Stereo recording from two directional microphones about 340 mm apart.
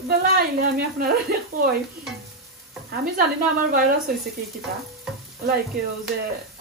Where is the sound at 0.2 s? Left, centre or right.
Right.